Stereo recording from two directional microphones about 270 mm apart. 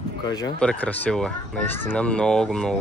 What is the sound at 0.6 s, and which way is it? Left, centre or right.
Speech, centre.